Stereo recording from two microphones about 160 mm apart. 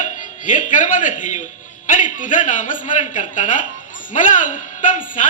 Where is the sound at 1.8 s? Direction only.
55° left (ahead or behind).